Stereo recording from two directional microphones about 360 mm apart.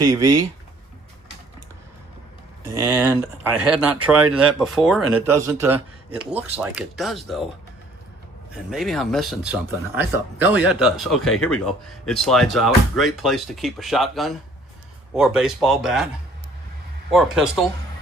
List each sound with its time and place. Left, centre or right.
0.0 s speech: centre
2.6 s speech: centre
8.7 s speech: centre
17.1 s speech: centre